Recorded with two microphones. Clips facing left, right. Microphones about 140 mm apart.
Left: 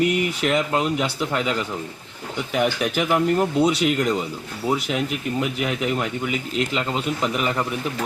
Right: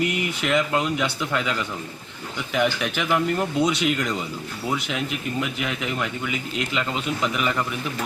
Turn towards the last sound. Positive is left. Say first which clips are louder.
# left 1 dB
turn(degrees=35)  # may be behind; listen again after turning